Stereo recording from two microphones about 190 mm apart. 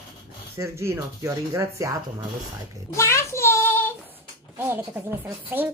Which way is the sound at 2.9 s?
15° left (ahead or behind).